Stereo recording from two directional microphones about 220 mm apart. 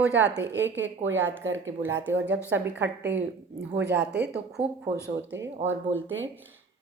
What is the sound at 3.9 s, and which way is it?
Speech, 5° right (ahead or behind).